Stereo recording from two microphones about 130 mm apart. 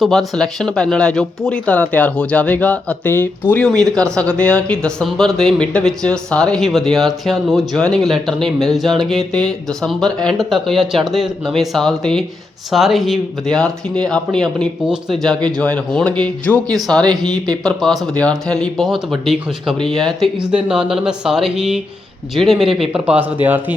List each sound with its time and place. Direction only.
0.0 s speech: centre (ahead or behind)
3.7 s speech: 5° left (ahead or behind)
17.1 s speech: 30° right (ahead or behind)
17.6 s speech: centre (ahead or behind); by 23.7 s 15° right (ahead or behind)